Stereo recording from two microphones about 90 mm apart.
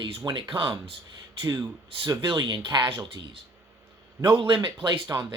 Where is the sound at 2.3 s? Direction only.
55° right (ahead or behind).